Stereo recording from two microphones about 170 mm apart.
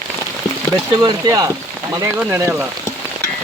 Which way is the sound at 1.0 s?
20° right (ahead or behind).